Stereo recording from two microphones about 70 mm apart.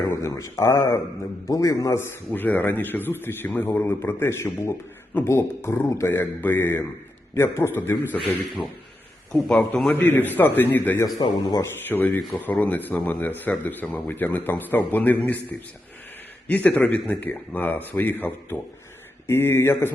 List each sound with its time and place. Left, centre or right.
0.1 s speech: left
2.3 s a man's voice: left
6.1 s a man's voice: left
9.3 s a man's voice: centre
9.9 s speech: left
11.0 s a man's voice: left
11.6 s speech: left
16.5 s a man's voice: left